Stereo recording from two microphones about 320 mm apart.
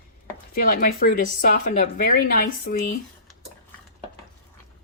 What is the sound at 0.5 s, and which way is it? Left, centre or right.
Speech, left.